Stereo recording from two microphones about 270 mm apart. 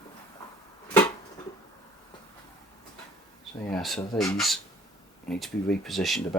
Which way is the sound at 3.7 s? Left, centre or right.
Centre.